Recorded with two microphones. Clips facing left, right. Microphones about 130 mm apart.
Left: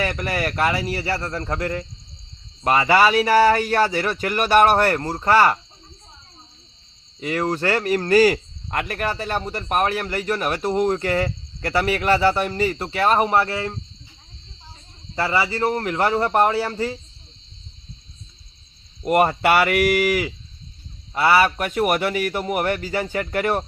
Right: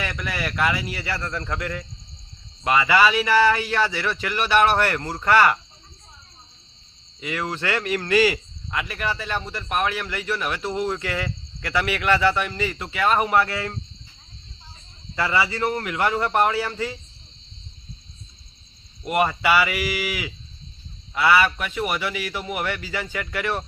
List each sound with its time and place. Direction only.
0.0 s speech: 45° left (ahead or behind)
7.2 s speech: 40° left (ahead or behind); by 13.7 s 25° left (ahead or behind)
15.1 s speech: 35° left (ahead or behind)
19.0 s speech: 45° left (ahead or behind)